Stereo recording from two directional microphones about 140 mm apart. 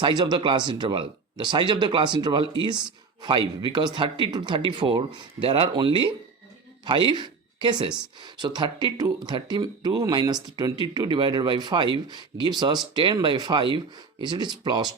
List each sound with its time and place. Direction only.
0.0 s speech: 30° right (ahead or behind)